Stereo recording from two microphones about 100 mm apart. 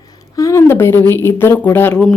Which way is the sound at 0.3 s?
30° left (ahead or behind).